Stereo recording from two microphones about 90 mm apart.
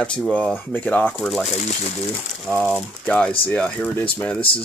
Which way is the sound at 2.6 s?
5° left (ahead or behind).